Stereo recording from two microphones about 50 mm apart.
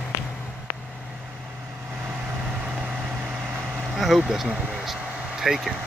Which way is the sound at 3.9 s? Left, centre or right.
Centre.